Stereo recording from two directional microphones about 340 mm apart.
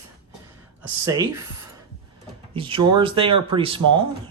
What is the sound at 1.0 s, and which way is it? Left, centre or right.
Speech, centre.